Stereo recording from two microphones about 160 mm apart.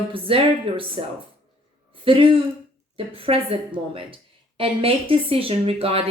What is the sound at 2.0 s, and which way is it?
A woman's voice, 35° right (ahead or behind).